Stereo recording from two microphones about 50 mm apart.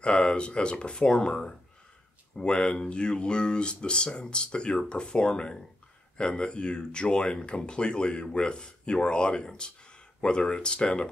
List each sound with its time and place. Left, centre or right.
0.0 s speech: left